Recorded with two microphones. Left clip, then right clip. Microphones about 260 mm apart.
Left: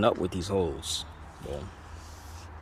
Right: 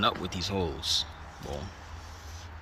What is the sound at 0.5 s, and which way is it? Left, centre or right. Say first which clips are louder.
Speech: even; centre.